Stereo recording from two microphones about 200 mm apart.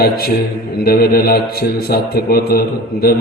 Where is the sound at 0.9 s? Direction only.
50° left (ahead or behind).